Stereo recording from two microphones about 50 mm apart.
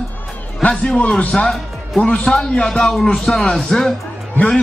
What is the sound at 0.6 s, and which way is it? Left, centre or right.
A man's voice, centre.